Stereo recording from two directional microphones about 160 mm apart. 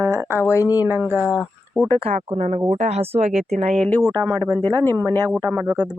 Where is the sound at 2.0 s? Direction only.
40° right (ahead or behind).